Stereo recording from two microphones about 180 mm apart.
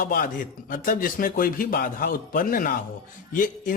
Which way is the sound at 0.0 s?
50° left (ahead or behind).